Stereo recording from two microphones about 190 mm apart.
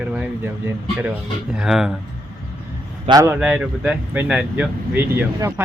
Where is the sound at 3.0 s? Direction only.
20° right (ahead or behind).